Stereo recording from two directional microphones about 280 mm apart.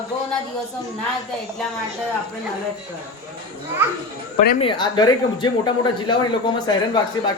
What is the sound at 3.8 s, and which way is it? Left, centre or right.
Speech, centre.